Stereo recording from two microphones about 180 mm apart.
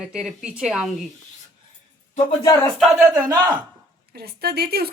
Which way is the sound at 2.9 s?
15° right (ahead or behind).